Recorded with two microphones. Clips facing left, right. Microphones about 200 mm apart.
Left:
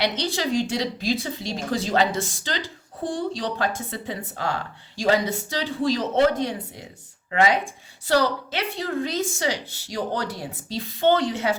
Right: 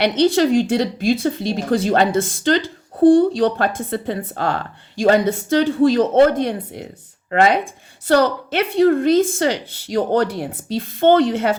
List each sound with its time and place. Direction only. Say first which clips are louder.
0.0 s a woman's voice: right 10 dB; 55° right (ahead or behind)